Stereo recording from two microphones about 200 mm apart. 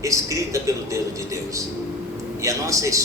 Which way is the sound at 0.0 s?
15° right (ahead or behind).